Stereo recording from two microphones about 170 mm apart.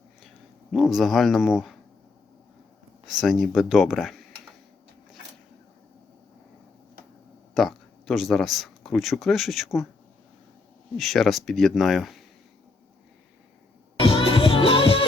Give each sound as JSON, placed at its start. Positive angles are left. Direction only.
{"t": 0.7, "sound": "speech", "side_deg": 0}
{"t": 3.1, "sound": "speech", "side_deg": 0}
{"t": 7.5, "sound": "speech", "side_deg": 0}
{"t": 10.9, "sound": "speech", "side_deg": 0}
{"t": 14.0, "sound": "music", "side_deg": 30}